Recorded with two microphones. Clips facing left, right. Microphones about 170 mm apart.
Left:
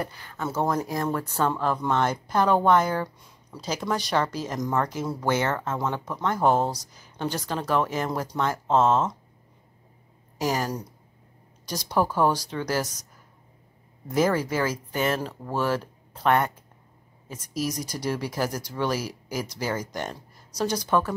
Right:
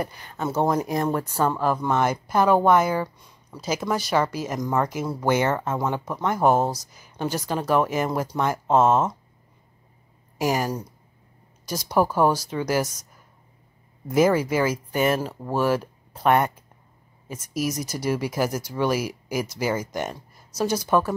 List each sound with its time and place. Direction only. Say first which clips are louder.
0.0 s speech: right 3 dB; 15° right (ahead or behind)
10.4 s speech: right 3 dB; 10° right (ahead or behind)
14.0 s speech: right 4 dB; 10° right (ahead or behind)